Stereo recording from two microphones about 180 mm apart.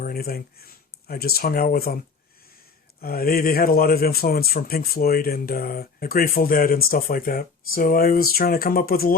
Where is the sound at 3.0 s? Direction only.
55° left (ahead or behind).